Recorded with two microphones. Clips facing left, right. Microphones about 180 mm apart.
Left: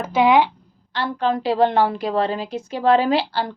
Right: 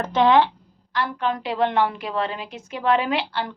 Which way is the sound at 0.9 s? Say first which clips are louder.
Left 3 dB; 30° left (ahead or behind).